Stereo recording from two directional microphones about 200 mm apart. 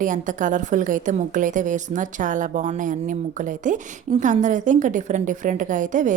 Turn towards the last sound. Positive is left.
turn(degrees=-40)  # may be behind; listen again after turning